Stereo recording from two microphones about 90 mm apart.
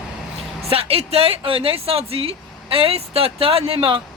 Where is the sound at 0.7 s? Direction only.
90° right.